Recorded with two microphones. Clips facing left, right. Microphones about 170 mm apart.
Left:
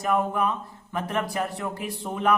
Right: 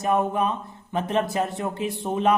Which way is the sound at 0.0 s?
20° right (ahead or behind).